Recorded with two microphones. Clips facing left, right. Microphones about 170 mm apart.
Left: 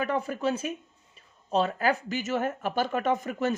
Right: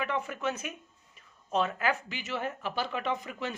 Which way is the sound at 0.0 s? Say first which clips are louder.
Left 4 dB; 40° left (ahead or behind).